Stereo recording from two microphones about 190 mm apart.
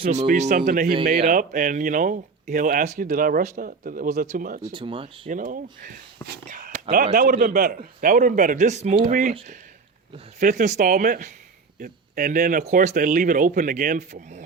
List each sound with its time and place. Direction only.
0.1 s speech: 40° right (ahead or behind)
4.6 s speech: 25° right (ahead or behind)
5.3 s speech: 45° right (ahead or behind)
5.8 s a sound: 50° right (ahead or behind)
6.9 s speech: 45° right (ahead or behind)
10.4 s speech: 40° right (ahead or behind)